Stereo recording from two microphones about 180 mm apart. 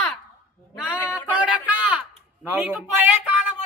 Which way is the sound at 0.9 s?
15° left (ahead or behind).